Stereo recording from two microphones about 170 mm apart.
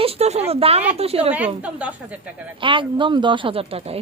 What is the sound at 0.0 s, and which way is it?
Speech, 35° right (ahead or behind).